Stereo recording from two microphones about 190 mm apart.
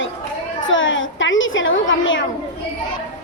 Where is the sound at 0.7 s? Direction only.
90° left.